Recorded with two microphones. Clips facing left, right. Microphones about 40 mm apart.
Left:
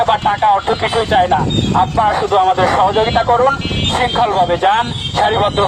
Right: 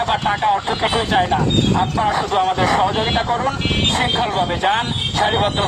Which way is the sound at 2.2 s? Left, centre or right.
Left.